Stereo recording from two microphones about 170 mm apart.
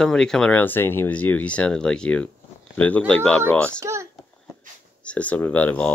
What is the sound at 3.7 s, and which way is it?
Speech, 15° right (ahead or behind).